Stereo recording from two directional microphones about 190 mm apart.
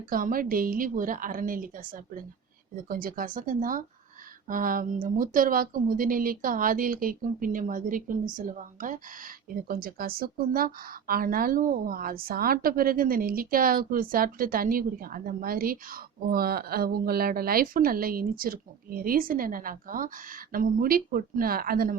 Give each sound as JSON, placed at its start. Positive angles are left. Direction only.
{"t": 0.1, "sound": "speech", "side_deg": -45}
{"t": 2.7, "sound": "speech", "side_deg": -50}